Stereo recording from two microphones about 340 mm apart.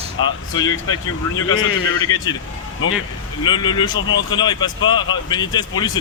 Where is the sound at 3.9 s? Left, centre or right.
Left.